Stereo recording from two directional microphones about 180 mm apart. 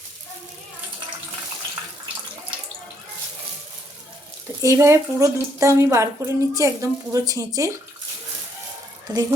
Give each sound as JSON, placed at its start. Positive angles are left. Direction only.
{"t": 4.6, "sound": "a woman's voice", "side_deg": -15}
{"t": 9.1, "sound": "speech", "side_deg": -25}